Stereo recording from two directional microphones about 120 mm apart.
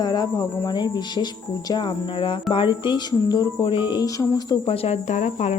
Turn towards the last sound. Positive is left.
turn(degrees=70)  # may be behind; listen again after turning